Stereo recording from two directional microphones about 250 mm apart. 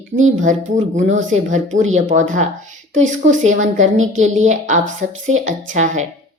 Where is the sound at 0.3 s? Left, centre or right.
Right.